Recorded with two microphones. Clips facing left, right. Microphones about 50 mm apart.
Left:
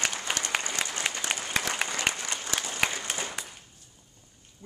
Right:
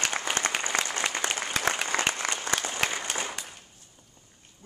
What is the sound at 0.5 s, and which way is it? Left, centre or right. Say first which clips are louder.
Applause: right 3 dB; right.